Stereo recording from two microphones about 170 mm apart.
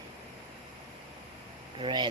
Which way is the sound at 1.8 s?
30° right (ahead or behind).